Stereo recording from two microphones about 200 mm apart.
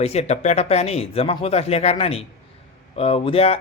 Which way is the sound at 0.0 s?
30° left (ahead or behind).